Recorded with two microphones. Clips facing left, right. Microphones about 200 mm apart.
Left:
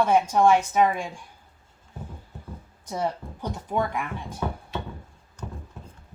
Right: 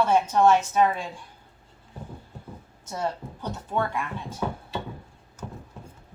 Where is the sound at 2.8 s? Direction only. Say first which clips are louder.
Left 2 dB; 15° left (ahead or behind).